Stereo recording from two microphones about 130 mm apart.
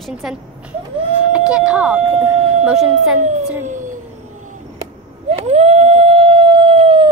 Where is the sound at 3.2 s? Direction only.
65° right (ahead or behind).